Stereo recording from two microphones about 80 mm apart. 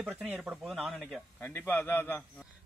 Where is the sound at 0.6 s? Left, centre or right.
Centre.